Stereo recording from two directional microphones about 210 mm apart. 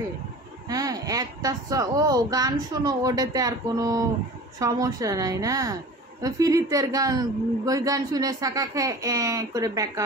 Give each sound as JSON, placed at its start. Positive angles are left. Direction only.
{"t": 0.7, "sound": "a woman's voice", "side_deg": -15}